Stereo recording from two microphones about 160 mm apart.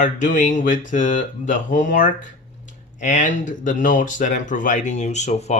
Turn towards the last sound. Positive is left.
turn(degrees=45)  # may be behind; listen again after turning